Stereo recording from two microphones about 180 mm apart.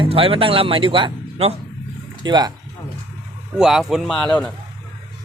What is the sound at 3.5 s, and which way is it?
Speech, 5° right (ahead or behind).